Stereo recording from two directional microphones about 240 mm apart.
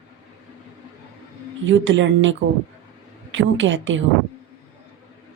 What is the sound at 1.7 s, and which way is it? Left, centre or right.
A woman's voice, right.